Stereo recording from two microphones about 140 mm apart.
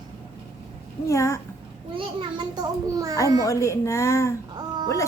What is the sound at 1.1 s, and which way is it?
Speech, 20° left (ahead or behind).